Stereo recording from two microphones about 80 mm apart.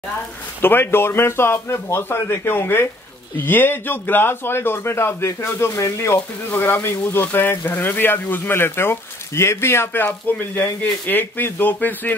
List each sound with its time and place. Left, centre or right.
0.6 s a man's voice: left